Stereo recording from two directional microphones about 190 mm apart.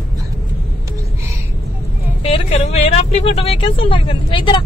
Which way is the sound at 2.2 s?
35° left (ahead or behind).